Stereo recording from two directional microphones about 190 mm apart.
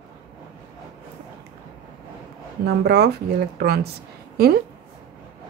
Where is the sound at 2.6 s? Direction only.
60° right (ahead or behind).